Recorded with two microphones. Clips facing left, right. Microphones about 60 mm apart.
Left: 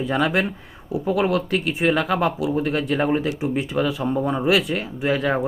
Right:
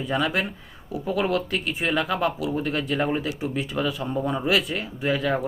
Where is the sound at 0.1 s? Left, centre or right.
Left.